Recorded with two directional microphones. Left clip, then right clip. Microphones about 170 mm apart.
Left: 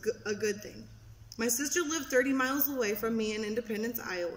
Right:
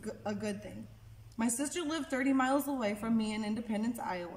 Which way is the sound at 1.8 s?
20° right (ahead or behind).